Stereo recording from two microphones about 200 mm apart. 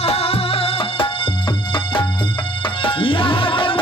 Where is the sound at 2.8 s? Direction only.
25° left (ahead or behind).